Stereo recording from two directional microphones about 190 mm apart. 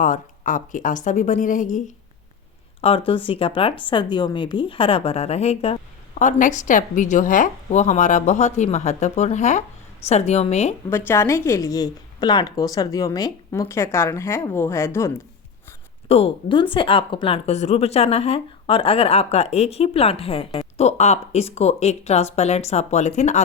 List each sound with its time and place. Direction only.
0.0 s a woman's voice: 40° left (ahead or behind)
3.1 s a woman's voice: 30° left (ahead or behind)
10.8 s a woman's voice: 10° left (ahead or behind)
16.0 s speech: 30° left (ahead or behind)